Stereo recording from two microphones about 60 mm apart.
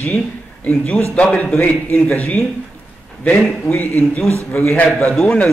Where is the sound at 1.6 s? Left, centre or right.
Left.